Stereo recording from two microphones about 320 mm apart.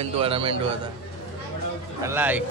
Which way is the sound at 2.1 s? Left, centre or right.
Centre.